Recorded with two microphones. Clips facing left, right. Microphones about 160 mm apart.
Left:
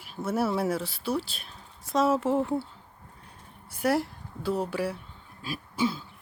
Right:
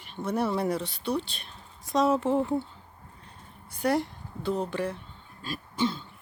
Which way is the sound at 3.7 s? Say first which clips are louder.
Even; 5° left (ahead or behind).